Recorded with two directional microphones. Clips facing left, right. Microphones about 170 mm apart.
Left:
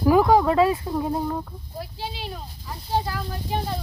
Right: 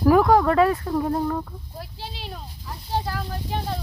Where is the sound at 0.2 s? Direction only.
5° left (ahead or behind).